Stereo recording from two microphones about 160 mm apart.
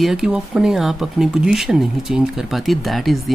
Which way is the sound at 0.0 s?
5° right (ahead or behind).